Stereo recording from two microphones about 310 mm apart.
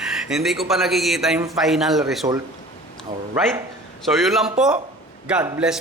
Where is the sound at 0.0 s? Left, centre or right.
Centre.